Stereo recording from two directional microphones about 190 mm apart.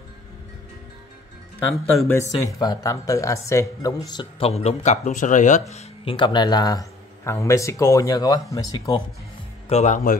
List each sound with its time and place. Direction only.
2.0 s speech: 15° left (ahead or behind)
4.1 s speech: 25° left (ahead or behind)
9.7 s speech: 35° left (ahead or behind)